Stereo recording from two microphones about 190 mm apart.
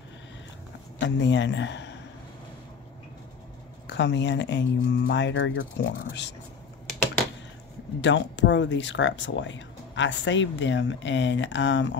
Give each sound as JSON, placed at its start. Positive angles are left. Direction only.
{"t": 0.9, "sound": "a man's voice", "side_deg": 70}
{"t": 3.8, "sound": "speech", "side_deg": 65}
{"t": 8.0, "sound": "speech", "side_deg": 75}